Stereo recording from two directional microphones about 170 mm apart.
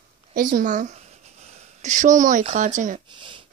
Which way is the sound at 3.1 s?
30° right (ahead or behind).